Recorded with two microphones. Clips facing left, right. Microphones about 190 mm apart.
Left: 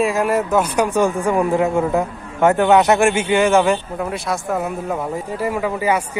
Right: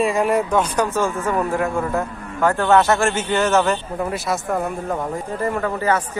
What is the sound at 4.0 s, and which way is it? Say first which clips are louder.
Speech: even; centre (ahead or behind).